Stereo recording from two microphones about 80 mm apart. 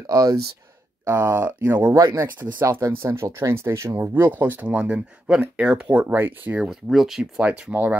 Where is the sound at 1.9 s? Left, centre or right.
Right.